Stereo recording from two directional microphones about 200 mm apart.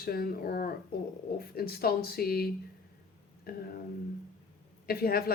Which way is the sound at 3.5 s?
50° left (ahead or behind).